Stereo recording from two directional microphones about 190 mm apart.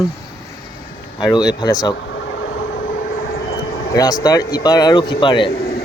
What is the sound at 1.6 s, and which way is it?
Speech, 20° left (ahead or behind).